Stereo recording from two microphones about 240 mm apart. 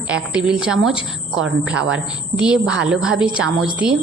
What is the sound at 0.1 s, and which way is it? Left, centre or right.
A woman's voice, centre.